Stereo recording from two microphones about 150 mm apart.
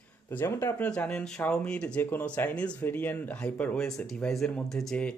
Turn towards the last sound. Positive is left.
turn(degrees=5)  # may be behind; listen again after turning